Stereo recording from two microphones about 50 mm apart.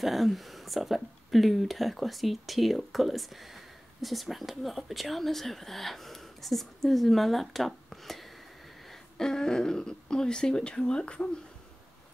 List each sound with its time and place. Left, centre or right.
0.0 s speech: centre
9.2 s speech: centre